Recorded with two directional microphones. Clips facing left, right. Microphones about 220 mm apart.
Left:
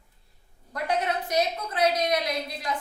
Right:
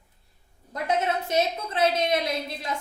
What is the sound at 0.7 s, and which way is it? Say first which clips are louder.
A woman's voice: right 1 dB; 25° right (ahead or behind).